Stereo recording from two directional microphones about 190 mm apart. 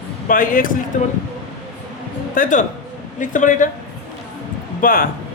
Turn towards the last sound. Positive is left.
turn(degrees=45)  # may be behind; listen again after turning